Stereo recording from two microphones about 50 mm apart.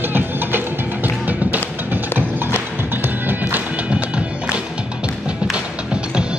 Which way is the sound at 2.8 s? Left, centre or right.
Right.